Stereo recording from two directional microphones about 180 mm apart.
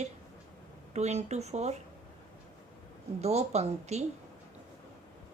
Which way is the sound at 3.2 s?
35° right (ahead or behind).